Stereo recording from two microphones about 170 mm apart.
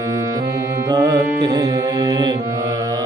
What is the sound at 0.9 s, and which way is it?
Music, 20° right (ahead or behind).